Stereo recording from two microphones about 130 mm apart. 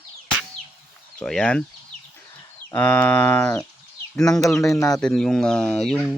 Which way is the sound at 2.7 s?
15° left (ahead or behind).